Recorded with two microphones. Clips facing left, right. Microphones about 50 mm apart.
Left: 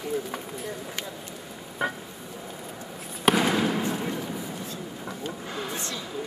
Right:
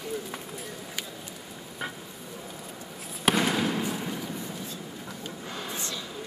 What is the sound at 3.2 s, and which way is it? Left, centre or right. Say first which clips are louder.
Fireworks: left 3 dB; centre.